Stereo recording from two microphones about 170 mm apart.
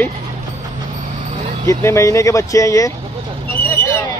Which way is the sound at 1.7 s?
15° left (ahead or behind).